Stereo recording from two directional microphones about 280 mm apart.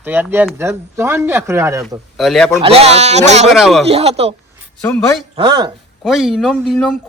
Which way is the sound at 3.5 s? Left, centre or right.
Centre.